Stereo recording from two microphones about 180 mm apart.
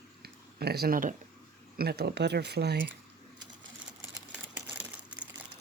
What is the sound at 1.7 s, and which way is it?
Speech, 60° right (ahead or behind).